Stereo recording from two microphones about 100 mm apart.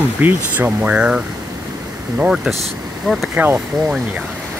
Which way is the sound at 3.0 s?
Centre (ahead or behind).